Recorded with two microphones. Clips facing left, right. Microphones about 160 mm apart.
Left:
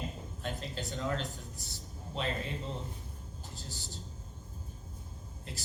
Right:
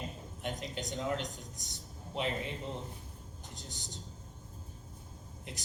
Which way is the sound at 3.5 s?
20° right (ahead or behind).